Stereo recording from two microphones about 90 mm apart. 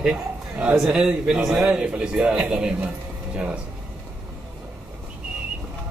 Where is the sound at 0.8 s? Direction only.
10° right (ahead or behind).